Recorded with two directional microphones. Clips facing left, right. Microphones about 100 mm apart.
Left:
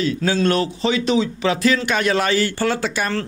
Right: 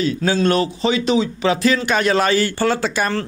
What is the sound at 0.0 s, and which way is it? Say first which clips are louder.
A man's voice: right 1 dB; 30° right (ahead or behind).